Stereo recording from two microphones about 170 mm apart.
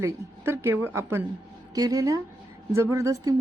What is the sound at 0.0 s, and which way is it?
A woman's voice, 15° right (ahead or behind).